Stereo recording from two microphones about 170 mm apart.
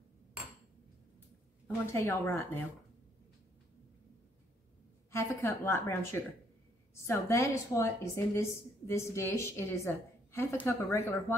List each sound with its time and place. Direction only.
1.9 s a woman's voice: 15° left (ahead or behind)
5.1 s a woman's voice: 15° left (ahead or behind)